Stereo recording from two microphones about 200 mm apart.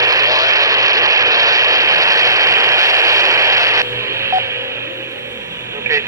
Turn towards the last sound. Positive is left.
turn(degrees=-15)  # may be behind; listen again after turning